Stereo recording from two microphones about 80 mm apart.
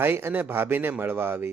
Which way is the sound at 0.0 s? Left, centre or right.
Right.